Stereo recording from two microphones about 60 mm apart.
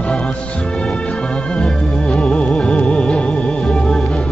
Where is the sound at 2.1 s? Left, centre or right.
Centre.